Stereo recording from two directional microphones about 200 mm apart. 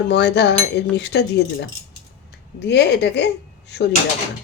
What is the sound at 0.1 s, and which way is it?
Speech, 60° left (ahead or behind).